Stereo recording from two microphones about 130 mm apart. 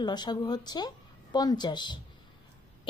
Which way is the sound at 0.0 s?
35° left (ahead or behind).